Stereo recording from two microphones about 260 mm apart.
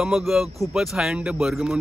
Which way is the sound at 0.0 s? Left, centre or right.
Centre.